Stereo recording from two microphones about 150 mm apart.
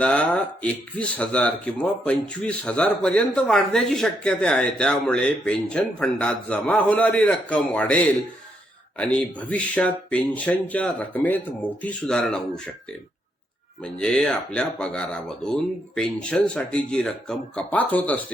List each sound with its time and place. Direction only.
0.0 s speech: 10° left (ahead or behind)
9.0 s speech: 10° left (ahead or behind)
13.8 s speech: 5° left (ahead or behind)